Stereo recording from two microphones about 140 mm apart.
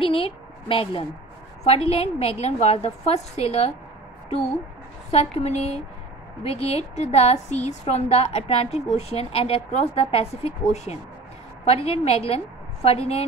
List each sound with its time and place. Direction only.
0.0 s a child's voice: 40° left (ahead or behind)
5.1 s a woman's voice: 50° left (ahead or behind)